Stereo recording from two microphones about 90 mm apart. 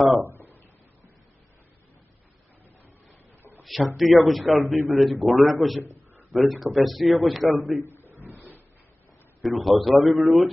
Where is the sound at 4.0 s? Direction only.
Centre (ahead or behind).